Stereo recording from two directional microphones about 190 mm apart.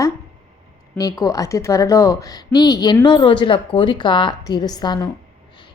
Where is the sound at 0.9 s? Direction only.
20° left (ahead or behind).